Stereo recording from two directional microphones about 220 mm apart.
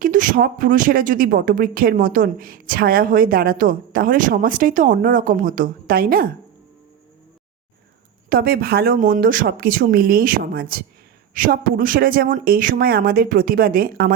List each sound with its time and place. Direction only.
0.0 s speech: 40° right (ahead or behind)
8.3 s speech: 45° right (ahead or behind)